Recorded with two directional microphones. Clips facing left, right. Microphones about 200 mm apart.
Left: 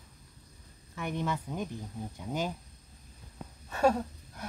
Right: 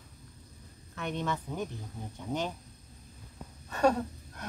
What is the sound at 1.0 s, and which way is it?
Child singing, 10° left (ahead or behind).